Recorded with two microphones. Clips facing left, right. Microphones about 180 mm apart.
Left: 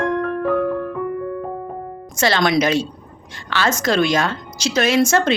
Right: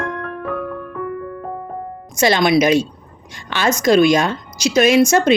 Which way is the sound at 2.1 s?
15° right (ahead or behind).